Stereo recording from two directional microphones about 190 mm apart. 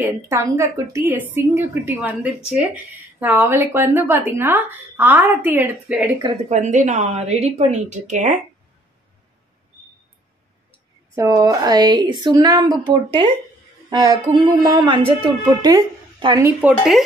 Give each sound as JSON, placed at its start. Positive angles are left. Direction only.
{"t": 0.0, "sound": "a woman's voice", "side_deg": -15}
{"t": 6.5, "sound": "speech", "side_deg": -40}
{"t": 11.1, "sound": "a woman's voice", "side_deg": -20}